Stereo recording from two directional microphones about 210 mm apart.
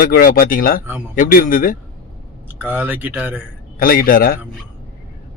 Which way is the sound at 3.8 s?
45° left (ahead or behind).